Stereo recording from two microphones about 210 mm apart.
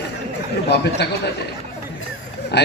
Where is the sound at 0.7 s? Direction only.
50° left (ahead or behind).